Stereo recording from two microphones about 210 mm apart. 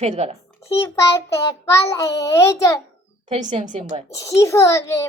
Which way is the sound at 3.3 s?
35° right (ahead or behind).